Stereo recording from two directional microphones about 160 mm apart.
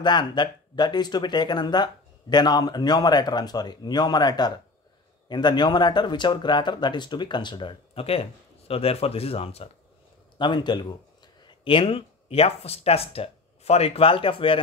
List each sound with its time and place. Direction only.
0.0 s speech: 30° left (ahead or behind)